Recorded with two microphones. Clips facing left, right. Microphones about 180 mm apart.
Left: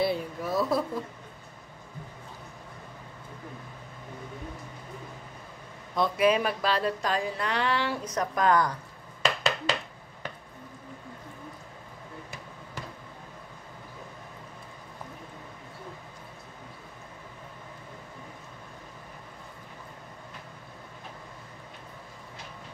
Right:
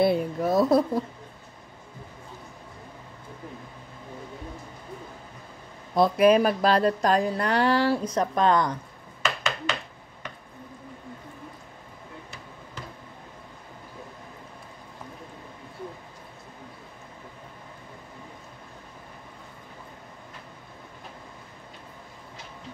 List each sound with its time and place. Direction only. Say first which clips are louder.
0.0 s speech: right 6 dB; 50° right (ahead or behind)
5.9 s speech: right 6 dB; 40° right (ahead or behind); by 8.7 s 25° right (ahead or behind)
9.2 s a sound: left 1 dB; 35° left (ahead or behind)